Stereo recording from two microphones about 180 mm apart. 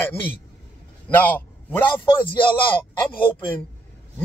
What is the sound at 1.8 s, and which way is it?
Speech, 25° left (ahead or behind).